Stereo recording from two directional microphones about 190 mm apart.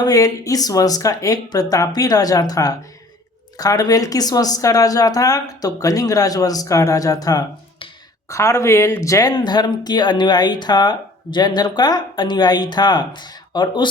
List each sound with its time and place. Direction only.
0.0 s speech: 20° left (ahead or behind)